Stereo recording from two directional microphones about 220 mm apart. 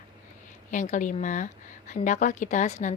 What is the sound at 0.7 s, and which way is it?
Speech, 35° left (ahead or behind).